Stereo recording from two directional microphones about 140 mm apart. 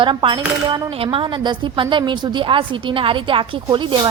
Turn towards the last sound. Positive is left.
turn(degrees=-35)  # may be behind; listen again after turning